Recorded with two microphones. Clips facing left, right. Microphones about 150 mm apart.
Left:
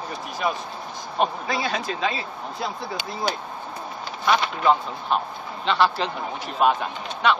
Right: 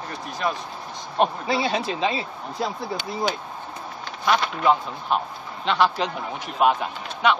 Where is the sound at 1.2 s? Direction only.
25° right (ahead or behind).